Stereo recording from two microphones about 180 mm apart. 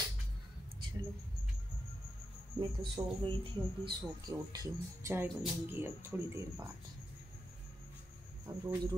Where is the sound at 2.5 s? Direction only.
30° right (ahead or behind).